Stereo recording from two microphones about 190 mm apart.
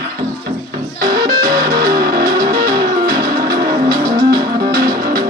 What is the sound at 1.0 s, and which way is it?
Music, 55° right (ahead or behind).